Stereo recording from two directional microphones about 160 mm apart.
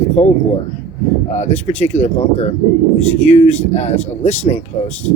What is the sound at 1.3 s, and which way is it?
Speech, 45° left (ahead or behind).